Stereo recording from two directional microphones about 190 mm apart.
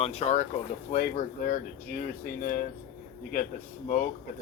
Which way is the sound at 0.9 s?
45° left (ahead or behind).